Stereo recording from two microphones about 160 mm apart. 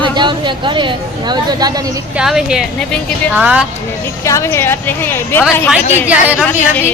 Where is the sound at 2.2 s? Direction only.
5° right (ahead or behind).